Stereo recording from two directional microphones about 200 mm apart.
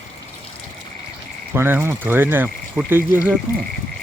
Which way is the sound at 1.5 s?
10° right (ahead or behind).